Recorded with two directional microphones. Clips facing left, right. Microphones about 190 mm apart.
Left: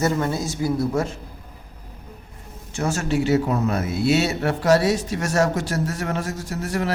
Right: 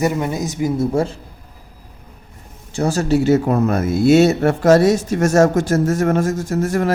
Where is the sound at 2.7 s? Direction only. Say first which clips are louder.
Right 6 dB; 35° right (ahead or behind).